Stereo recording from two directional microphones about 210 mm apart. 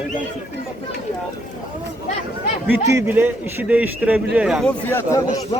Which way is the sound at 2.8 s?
10° right (ahead or behind).